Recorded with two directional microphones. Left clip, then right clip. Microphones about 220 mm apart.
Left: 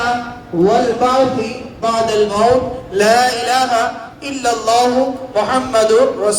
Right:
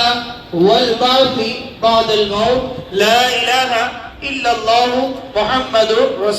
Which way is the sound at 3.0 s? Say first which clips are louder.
Even; 45° left (ahead or behind).